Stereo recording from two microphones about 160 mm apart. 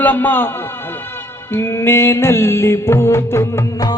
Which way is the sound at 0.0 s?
10° left (ahead or behind).